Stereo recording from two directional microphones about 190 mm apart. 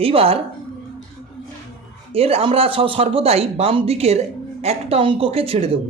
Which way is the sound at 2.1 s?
30° right (ahead or behind).